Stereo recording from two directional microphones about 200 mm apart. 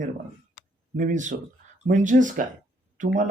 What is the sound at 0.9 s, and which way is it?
Speech, 40° right (ahead or behind).